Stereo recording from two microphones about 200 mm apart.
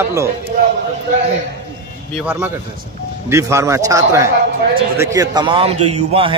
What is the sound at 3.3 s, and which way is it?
A man's voice, 15° right (ahead or behind).